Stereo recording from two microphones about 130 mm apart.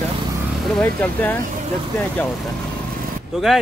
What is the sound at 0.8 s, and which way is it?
Speech, 15° left (ahead or behind).